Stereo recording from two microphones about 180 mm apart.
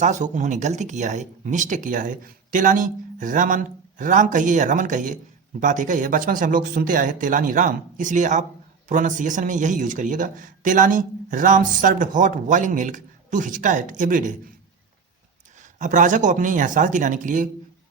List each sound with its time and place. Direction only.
0.0 s speech: 45° right (ahead or behind)
15.8 s speech: 45° right (ahead or behind)